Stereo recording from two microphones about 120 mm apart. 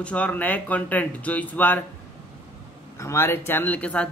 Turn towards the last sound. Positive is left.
turn(degrees=10)  # may be behind; listen again after turning